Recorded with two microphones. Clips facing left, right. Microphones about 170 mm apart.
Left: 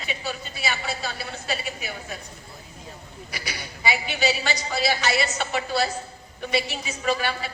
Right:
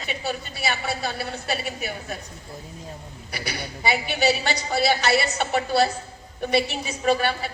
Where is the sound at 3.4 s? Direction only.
50° right (ahead or behind).